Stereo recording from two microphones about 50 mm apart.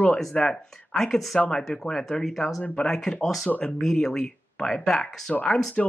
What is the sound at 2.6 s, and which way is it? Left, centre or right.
Speech, left.